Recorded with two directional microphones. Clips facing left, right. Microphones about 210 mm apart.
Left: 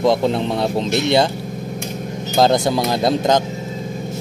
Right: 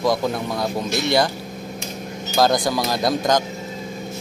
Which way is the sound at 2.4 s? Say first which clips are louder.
Left 3 dB; 25° left (ahead or behind).